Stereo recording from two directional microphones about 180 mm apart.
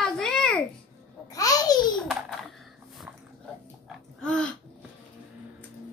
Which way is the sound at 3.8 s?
5° left (ahead or behind).